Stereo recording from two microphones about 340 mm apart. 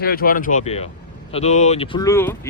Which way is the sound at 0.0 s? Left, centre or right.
Left.